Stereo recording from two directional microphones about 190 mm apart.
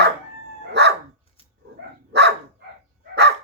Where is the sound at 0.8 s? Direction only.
65° right (ahead or behind).